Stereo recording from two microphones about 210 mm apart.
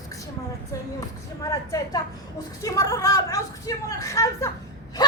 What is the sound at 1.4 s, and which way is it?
A woman's voice, 15° left (ahead or behind).